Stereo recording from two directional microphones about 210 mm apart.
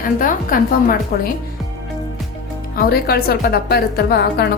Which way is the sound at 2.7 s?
45° left (ahead or behind).